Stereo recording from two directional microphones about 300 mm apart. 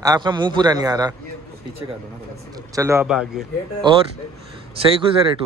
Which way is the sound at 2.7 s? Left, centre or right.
Centre.